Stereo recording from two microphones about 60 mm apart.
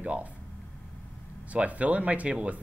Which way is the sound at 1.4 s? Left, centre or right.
Right.